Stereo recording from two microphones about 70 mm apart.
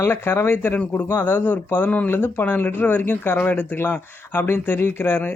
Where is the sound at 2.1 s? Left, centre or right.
Left.